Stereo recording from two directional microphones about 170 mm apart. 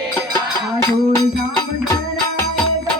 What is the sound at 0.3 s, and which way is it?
Music, 15° left (ahead or behind).